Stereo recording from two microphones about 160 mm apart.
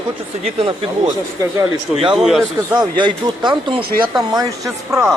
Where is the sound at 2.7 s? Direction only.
30° right (ahead or behind).